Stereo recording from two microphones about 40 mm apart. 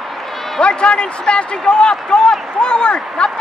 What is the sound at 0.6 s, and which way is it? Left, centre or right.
A man's voice, left.